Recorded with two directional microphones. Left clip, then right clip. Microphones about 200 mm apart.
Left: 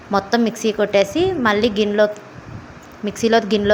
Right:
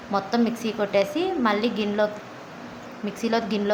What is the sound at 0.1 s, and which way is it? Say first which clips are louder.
A woman's voice: left 6 dB; 25° left (ahead or behind).